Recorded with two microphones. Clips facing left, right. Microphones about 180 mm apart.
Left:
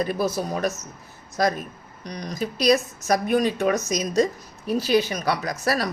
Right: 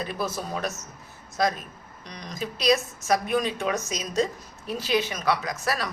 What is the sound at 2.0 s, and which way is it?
A woman's voice, 35° left (ahead or behind).